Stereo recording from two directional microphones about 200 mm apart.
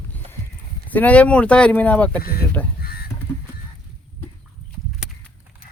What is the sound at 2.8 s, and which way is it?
Crow, 50° left (ahead or behind).